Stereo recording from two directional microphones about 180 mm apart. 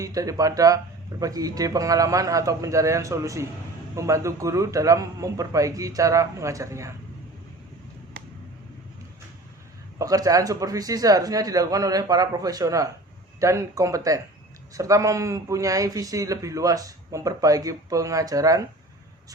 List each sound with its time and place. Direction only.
0.0 s a man's voice: 20° right (ahead or behind)
10.0 s a man's voice: 20° right (ahead or behind)